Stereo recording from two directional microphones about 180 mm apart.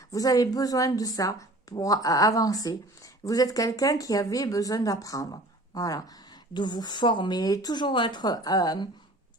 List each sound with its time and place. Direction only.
0.1 s a woman's voice: 20° left (ahead or behind)